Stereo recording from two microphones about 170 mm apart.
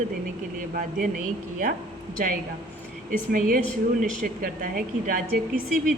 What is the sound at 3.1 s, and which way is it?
A woman's voice, 50° right (ahead or behind).